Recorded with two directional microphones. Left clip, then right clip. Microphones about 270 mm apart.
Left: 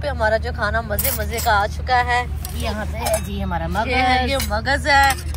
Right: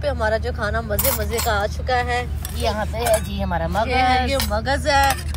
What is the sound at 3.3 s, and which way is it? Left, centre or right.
Speech, right.